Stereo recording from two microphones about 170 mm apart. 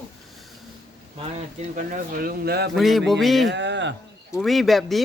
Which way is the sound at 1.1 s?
45° right (ahead or behind).